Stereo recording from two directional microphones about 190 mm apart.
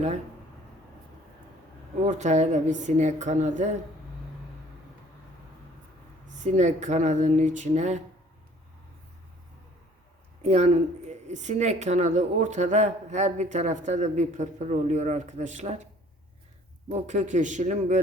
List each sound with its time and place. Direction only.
2.0 s a woman's voice: 40° right (ahead or behind)
6.4 s a woman's voice: 40° right (ahead or behind)
10.4 s a woman's voice: 35° right (ahead or behind)
16.9 s a woman's voice: 40° right (ahead or behind)